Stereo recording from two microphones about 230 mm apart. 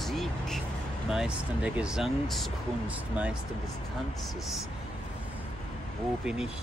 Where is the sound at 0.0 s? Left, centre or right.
Centre.